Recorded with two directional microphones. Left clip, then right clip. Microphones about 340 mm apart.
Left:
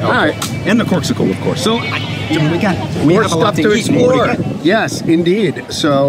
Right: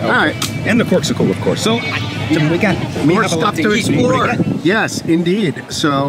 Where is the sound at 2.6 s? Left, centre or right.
Centre.